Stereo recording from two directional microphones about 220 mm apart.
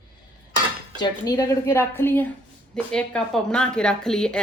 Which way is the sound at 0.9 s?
15° left (ahead or behind).